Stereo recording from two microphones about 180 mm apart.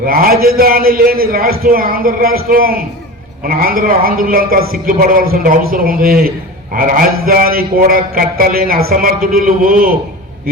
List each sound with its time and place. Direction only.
0.0 s a man's voice: 55° right (ahead or behind)